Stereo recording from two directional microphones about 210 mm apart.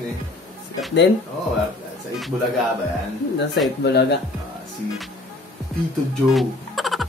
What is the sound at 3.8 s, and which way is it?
Chime, 55° left (ahead or behind).